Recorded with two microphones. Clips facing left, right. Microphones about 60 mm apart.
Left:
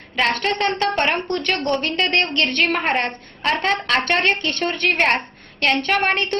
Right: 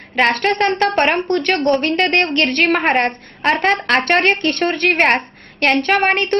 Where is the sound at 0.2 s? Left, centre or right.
Right.